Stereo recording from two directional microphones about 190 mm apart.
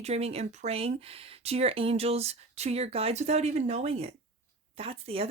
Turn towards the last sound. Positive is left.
turn(degrees=-30)  # may be behind; listen again after turning